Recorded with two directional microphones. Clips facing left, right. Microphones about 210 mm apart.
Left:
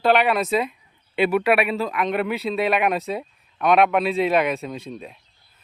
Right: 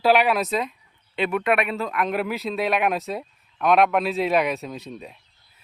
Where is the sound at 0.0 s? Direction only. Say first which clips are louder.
Even; centre (ahead or behind).